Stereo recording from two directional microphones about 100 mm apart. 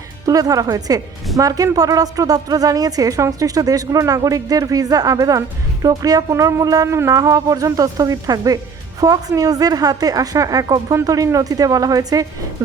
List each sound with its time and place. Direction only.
0.3 s a woman's voice: 35° right (ahead or behind)